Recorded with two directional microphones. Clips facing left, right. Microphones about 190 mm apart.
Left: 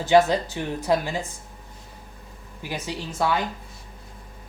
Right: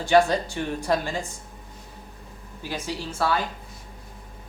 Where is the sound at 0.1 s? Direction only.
15° left (ahead or behind).